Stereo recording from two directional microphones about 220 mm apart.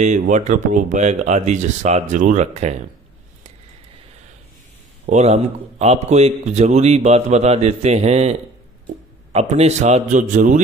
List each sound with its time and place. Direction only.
0.0 s speech: 35° right (ahead or behind)
5.0 s a man's voice: 30° right (ahead or behind)